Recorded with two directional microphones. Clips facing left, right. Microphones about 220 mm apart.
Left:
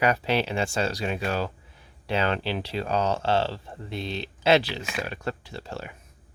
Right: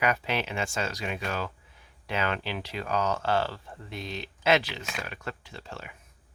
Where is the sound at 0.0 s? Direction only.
35° left (ahead or behind).